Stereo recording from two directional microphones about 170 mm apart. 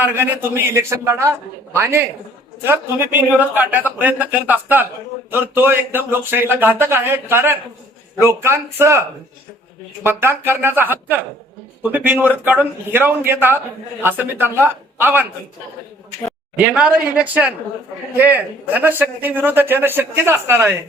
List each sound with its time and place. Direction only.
0.0 s a man's voice: 10° right (ahead or behind)
16.6 s a man's voice: 10° right (ahead or behind)